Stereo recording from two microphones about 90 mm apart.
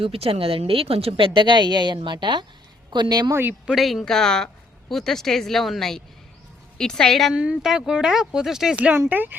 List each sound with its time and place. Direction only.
0.0 s a woman's voice: 90° right; by 3.3 s 45° right (ahead or behind)
3.7 s speech: centre (ahead or behind)
7.3 s speech: 10° right (ahead or behind)